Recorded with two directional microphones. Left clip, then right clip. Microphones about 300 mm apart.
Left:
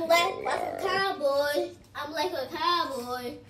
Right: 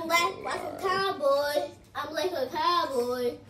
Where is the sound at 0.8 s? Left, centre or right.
Centre.